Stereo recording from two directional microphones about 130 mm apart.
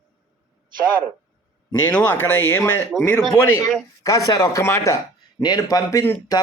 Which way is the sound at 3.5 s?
25° left (ahead or behind).